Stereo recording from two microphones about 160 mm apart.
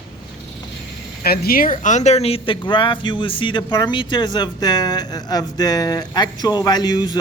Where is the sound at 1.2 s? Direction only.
70° left (ahead or behind).